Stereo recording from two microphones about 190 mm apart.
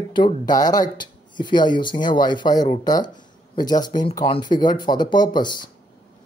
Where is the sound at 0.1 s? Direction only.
20° left (ahead or behind).